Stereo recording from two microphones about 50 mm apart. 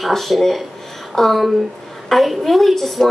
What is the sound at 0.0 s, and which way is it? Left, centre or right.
A woman's voice, centre.